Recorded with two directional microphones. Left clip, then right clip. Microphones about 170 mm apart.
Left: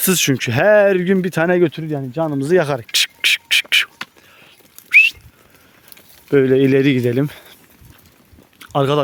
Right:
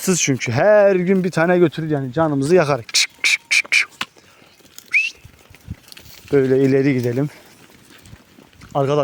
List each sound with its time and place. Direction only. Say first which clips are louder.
0.0 s speech: left 2 dB; 25° left (ahead or behind)
6.3 s speech: left 2 dB; 40° left (ahead or behind)
8.5 s a sound: left 2 dB; 35° left (ahead or behind)